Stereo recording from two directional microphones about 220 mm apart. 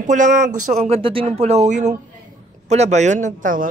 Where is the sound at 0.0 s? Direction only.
35° right (ahead or behind).